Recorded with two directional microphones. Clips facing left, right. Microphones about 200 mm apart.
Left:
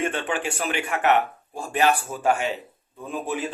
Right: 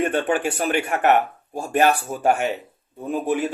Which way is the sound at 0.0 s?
40° right (ahead or behind).